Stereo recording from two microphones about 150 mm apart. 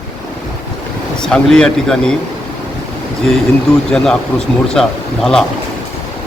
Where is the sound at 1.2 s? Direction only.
5° left (ahead or behind).